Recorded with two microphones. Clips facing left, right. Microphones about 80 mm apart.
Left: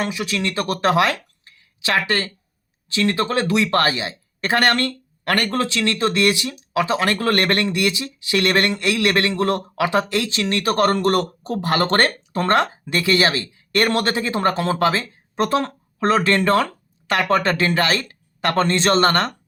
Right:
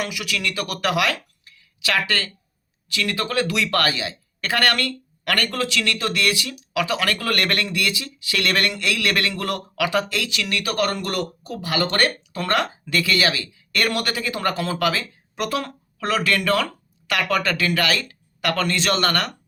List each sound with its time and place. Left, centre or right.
0.0 s speech: left